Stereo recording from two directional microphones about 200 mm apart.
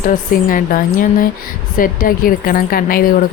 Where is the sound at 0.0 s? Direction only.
45° left (ahead or behind).